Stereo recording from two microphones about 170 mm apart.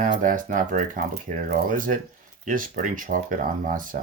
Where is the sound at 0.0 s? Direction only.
50° right (ahead or behind).